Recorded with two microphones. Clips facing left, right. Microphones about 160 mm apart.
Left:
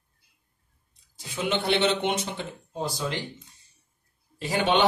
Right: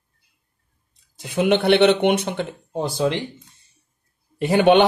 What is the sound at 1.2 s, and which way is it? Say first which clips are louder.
Speech: right 9 dB; 60° right (ahead or behind).